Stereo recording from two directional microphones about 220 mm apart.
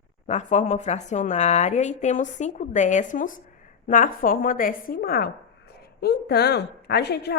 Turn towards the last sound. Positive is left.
turn(degrees=50)  # may be behind; listen again after turning